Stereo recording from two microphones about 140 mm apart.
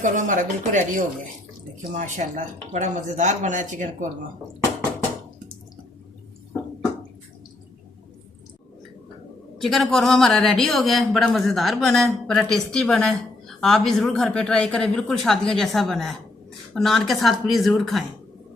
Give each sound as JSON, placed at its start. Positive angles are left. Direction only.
{"t": 0.0, "sound": "speech", "side_deg": -65}
{"t": 9.6, "sound": "speech", "side_deg": 0}